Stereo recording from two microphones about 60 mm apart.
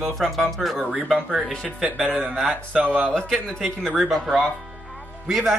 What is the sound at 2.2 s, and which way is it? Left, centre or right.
Speech, centre.